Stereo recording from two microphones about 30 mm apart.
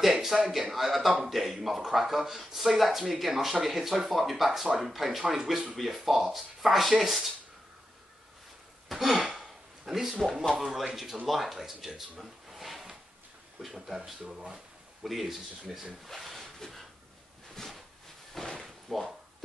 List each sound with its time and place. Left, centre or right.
0.0 s speech: centre
8.8 s a sound: centre
10.5 s speech: centre
14.2 s speech: centre
15.0 s speech: centre
15.7 s speech: centre
16.1 s a sound: centre
17.6 s a sound: centre
18.9 s speech: centre